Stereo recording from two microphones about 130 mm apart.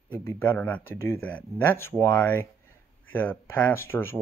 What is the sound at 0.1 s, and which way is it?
Speech, 20° left (ahead or behind).